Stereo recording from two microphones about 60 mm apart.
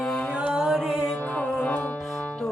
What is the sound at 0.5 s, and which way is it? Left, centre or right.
Music, centre.